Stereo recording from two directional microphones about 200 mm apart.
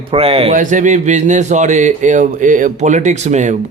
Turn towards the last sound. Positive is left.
turn(degrees=-35)  # may be behind; listen again after turning